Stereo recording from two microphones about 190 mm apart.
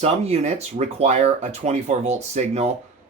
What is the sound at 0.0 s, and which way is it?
Speech, 35° right (ahead or behind).